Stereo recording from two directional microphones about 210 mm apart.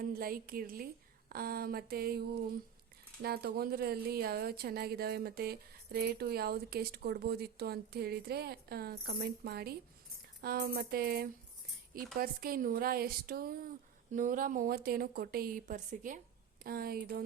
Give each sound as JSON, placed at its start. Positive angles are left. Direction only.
{"t": 0.0, "sound": "a woman's voice", "side_deg": -45}